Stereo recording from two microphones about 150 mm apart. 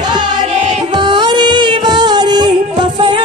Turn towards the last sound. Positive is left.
turn(degrees=-30)  # may be behind; listen again after turning